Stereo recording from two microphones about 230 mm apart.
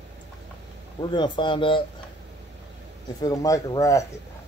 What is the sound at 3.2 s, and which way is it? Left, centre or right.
Speech, centre.